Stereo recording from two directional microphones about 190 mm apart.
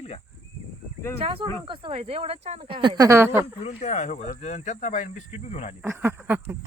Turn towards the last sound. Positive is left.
turn(degrees=-10)  # may be behind; listen again after turning